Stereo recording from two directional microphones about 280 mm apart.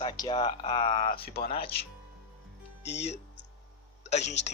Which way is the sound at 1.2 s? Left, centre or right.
Left.